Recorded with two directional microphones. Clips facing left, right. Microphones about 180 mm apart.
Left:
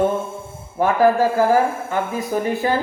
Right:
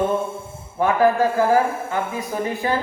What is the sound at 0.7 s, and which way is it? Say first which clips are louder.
A man's voice: left 2 dB; 35° left (ahead or behind).